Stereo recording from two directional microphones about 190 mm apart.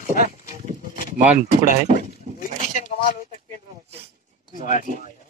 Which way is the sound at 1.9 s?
40° right (ahead or behind).